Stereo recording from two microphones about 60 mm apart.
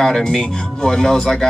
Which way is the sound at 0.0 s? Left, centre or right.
Centre.